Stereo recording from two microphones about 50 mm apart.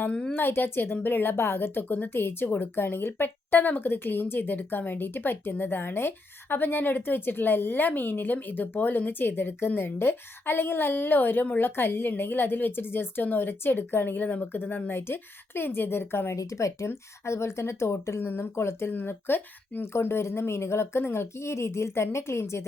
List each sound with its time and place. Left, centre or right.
0.3 s a woman's voice: left
16.3 s a woman's voice: left
18.9 s a woman's voice: left